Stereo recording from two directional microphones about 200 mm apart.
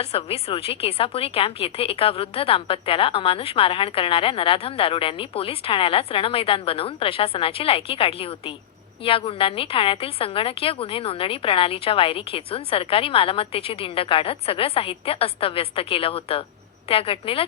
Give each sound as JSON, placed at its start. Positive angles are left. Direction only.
{"t": 0.0, "sound": "a woman's voice", "side_deg": 30}